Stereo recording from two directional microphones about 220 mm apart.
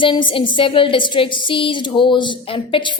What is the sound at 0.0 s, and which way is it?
A woman's voice, 20° left (ahead or behind).